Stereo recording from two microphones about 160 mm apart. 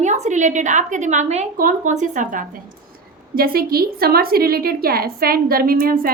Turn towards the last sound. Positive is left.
turn(degrees=-65)  # may be behind; listen again after turning